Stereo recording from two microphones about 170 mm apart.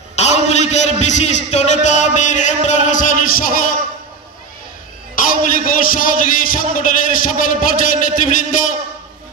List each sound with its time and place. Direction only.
0.1 s a man's voice: 40° left (ahead or behind); by 3.7 s 55° left (ahead or behind)
5.2 s a man's voice: 55° left (ahead or behind)